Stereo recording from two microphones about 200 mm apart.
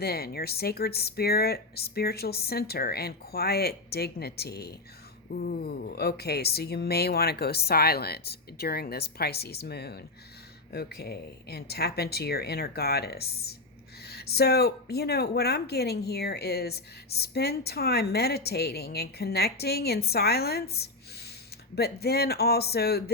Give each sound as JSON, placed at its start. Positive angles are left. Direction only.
{"t": 0.0, "sound": "speech", "side_deg": 50}